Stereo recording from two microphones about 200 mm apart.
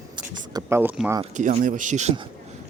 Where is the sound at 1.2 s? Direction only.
35° right (ahead or behind).